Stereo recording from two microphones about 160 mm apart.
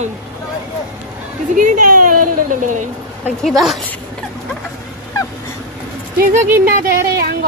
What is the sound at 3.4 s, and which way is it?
Speech, centre (ahead or behind).